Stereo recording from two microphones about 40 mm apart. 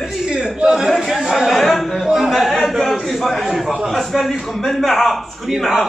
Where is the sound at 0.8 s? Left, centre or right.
Centre.